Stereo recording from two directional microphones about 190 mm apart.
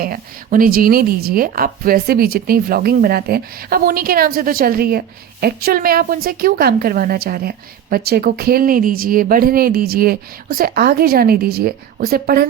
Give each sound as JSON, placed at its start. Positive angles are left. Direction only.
{"t": 0.0, "sound": "speech", "side_deg": -50}